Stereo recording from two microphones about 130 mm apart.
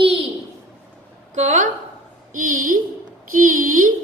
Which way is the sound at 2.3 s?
90° right.